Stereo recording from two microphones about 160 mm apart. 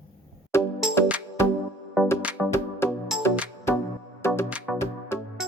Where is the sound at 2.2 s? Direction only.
10° right (ahead or behind).